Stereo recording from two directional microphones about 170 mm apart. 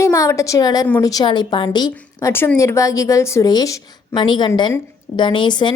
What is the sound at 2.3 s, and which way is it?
A woman's voice, 15° left (ahead or behind).